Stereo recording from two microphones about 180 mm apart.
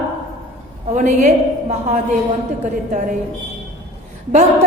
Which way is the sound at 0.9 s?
40° right (ahead or behind).